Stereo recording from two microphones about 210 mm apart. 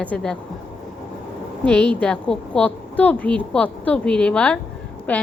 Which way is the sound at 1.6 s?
5° left (ahead or behind).